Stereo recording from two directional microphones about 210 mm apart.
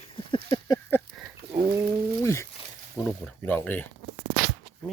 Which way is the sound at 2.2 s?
15° left (ahead or behind).